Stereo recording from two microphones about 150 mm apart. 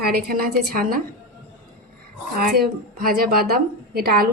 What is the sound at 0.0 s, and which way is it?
A woman's voice, 90° right.